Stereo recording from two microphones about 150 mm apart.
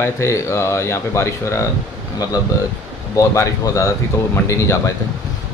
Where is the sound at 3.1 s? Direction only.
20° left (ahead or behind).